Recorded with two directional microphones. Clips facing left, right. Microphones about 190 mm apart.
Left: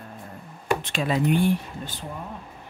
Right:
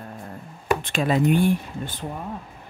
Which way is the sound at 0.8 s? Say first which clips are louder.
Right 3 dB; 50° right (ahead or behind).